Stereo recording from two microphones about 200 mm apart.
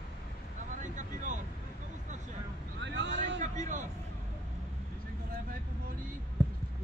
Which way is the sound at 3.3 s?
40° right (ahead or behind).